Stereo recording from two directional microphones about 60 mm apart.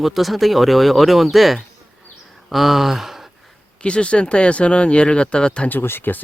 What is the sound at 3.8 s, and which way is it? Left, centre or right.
Speech, centre.